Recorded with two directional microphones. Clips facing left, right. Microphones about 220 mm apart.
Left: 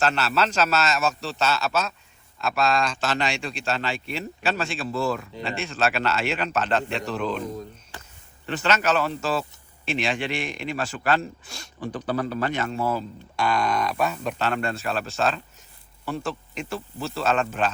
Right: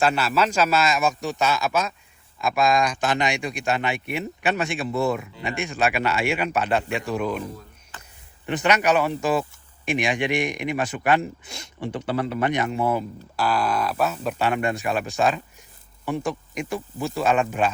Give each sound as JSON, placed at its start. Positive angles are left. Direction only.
{"t": 0.0, "sound": "a man's voice", "side_deg": -10}
{"t": 8.4, "sound": "speech", "side_deg": -15}
{"t": 13.3, "sound": "speech", "side_deg": -5}
{"t": 14.4, "sound": "speech", "side_deg": -15}